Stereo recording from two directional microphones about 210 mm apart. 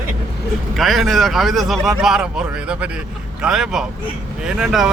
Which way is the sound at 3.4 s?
5° right (ahead or behind).